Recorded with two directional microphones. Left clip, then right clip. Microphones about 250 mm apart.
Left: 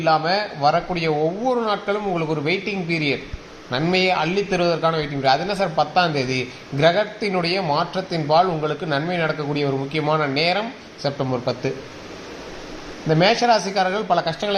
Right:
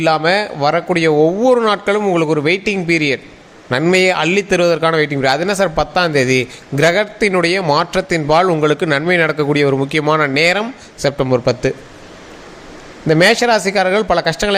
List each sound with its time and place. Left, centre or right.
0.0 s a man's voice: right
13.1 s a man's voice: right